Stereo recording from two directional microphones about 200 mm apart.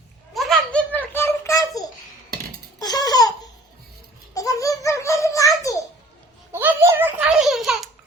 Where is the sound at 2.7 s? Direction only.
20° left (ahead or behind).